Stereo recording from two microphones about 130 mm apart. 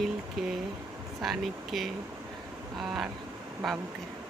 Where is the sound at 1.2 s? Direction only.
Centre (ahead or behind).